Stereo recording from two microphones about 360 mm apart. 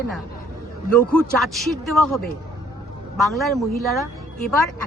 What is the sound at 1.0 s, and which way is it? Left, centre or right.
Speech, centre.